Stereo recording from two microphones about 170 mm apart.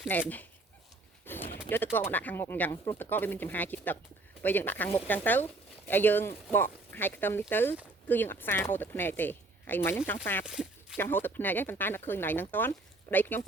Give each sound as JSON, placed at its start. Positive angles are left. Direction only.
{"t": 0.1, "sound": "speech", "side_deg": 10}
{"t": 1.2, "sound": "a sound", "side_deg": 10}
{"t": 1.7, "sound": "speech", "side_deg": 10}
{"t": 10.4, "sound": "speech", "side_deg": -5}
{"t": 10.9, "sound": "speech", "side_deg": 10}